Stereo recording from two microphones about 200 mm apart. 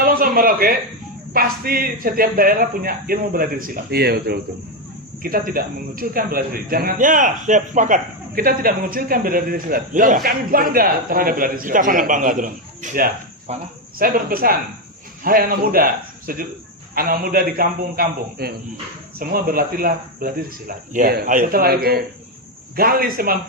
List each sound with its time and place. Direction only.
0.0 s a sound: 45° right (ahead or behind)
1.3 s a man's voice: 45° right (ahead or behind)
14.0 s a man's voice: 45° right (ahead or behind)